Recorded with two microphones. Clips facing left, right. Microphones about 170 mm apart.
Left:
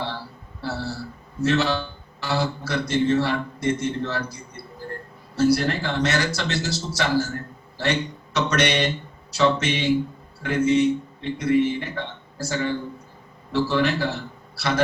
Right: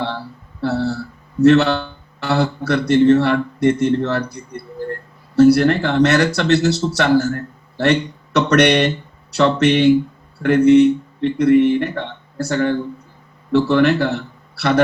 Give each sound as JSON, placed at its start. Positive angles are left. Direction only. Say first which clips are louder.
{"t": 0.6, "sound": "a man's voice", "louder": "right 10 dB", "side_deg": -65}